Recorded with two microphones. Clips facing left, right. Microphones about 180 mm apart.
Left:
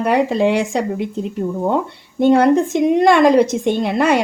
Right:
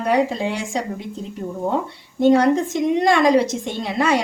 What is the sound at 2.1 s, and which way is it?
A woman's voice, 60° left (ahead or behind).